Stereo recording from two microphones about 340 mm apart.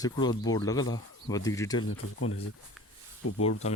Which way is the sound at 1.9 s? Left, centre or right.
Left.